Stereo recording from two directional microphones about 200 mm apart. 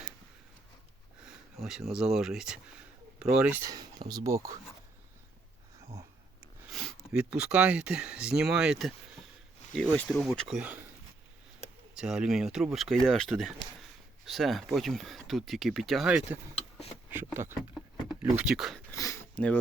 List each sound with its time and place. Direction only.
1.2 s speech: 5° right (ahead or behind)
3.7 s speech: 20° right (ahead or behind)
6.7 s speech: centre (ahead or behind)
11.9 s speech: 5° right (ahead or behind)
17.1 s a sound: 10° right (ahead or behind)
18.1 s speech: 5° right (ahead or behind)
18.9 s a sound: 15° left (ahead or behind)